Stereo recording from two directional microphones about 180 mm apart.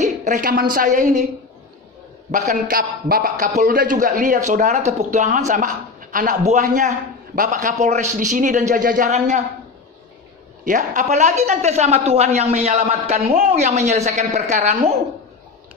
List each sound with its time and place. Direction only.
0.0 s a woman's voice: 45° right (ahead or behind)
2.3 s a man's voice: 45° right (ahead or behind)
10.6 s a woman's voice: 45° right (ahead or behind)